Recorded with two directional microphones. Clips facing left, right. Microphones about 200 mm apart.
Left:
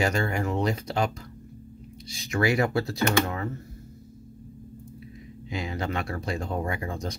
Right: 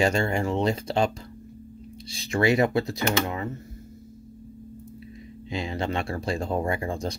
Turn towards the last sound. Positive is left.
turn(degrees=-30)  # may be behind; listen again after turning